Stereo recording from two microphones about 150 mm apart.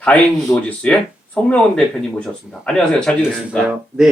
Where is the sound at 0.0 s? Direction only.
5° left (ahead or behind).